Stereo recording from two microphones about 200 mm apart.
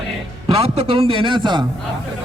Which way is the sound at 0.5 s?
30° right (ahead or behind).